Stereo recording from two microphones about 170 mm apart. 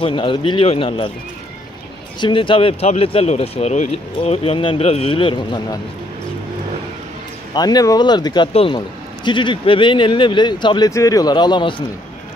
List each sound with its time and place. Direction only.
0.0 s speech: 30° left (ahead or behind)
2.1 s speech: 30° left (ahead or behind)
7.5 s speech: 25° left (ahead or behind)